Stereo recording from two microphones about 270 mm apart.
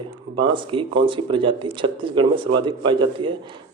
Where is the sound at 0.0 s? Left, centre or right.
Centre.